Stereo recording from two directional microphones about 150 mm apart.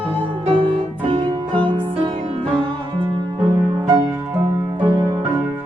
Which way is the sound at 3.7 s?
20° right (ahead or behind).